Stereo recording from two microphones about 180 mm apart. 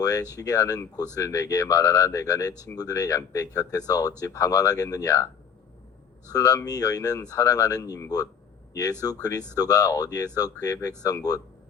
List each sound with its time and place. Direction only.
0.0 s speech: 20° left (ahead or behind)
6.3 s speech: 20° left (ahead or behind)